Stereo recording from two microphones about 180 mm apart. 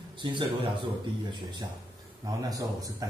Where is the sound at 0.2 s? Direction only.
25° right (ahead or behind).